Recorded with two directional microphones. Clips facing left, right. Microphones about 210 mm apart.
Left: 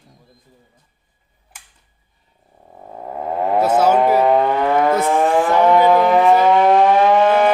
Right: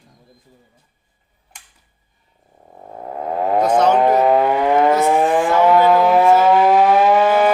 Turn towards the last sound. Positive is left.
turn(degrees=-5)  # may be behind; listen again after turning